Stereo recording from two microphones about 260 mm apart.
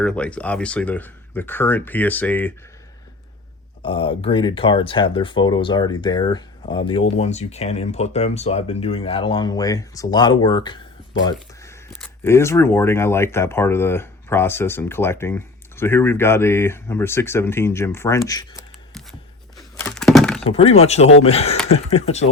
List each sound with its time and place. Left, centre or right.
0.0 s speech: centre
3.8 s speech: centre
11.2 s a sound: centre
11.9 s speech: centre
19.5 s a sound: centre
20.4 s speech: left